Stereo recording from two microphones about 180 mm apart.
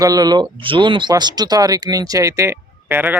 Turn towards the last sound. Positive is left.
turn(degrees=-10)  # may be behind; listen again after turning